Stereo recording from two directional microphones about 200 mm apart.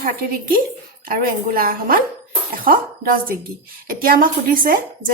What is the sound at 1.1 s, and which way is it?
Speech, 45° right (ahead or behind).